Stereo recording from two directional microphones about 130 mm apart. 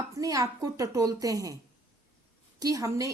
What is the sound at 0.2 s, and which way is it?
A woman's voice, 25° right (ahead or behind).